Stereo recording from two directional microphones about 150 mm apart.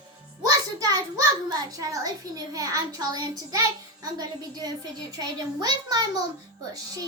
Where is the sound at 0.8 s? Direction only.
25° right (ahead or behind).